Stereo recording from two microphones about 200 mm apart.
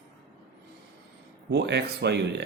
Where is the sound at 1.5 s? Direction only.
60° right (ahead or behind).